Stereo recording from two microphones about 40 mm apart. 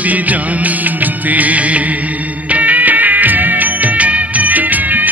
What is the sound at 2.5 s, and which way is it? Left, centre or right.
Music of bollywood, right.